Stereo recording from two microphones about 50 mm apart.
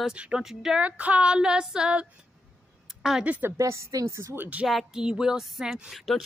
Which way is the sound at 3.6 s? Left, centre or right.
Right.